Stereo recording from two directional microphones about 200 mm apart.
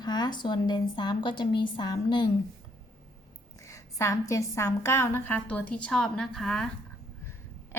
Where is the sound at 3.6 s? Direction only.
15° left (ahead or behind).